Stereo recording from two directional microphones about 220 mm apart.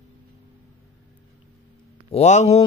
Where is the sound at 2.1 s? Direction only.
30° left (ahead or behind).